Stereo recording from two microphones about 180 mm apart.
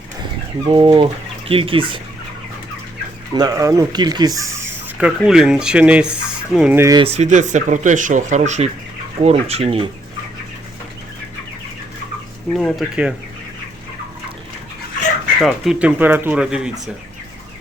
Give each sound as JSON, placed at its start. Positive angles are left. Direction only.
{"t": 0.6, "sound": "speech", "side_deg": -30}
{"t": 3.3, "sound": "speech", "side_deg": -20}
{"t": 7.0, "sound": "speech", "side_deg": -35}
{"t": 12.5, "sound": "speech", "side_deg": 0}
{"t": 15.4, "sound": "speech", "side_deg": 0}